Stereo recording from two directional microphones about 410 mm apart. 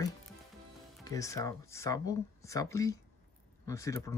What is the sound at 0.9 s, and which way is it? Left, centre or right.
Speech, centre.